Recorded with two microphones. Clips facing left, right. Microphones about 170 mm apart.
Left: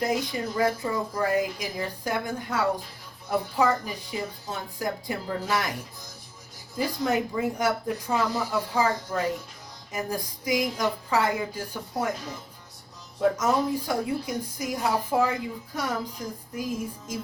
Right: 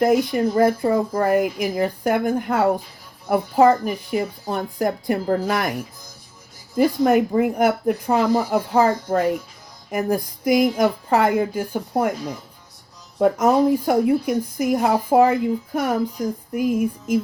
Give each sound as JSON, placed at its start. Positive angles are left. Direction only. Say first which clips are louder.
{"t": 0.0, "sound": "a woman's voice", "louder": "right 10 dB", "side_deg": -60}
{"t": 6.7, "sound": "a woman's voice", "louder": "right 10 dB", "side_deg": -55}
{"t": 13.1, "sound": "a woman's voice", "louder": "right 7 dB", "side_deg": -55}